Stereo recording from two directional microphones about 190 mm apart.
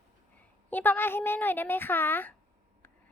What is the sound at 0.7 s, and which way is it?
A woman's voice, 10° left (ahead or behind).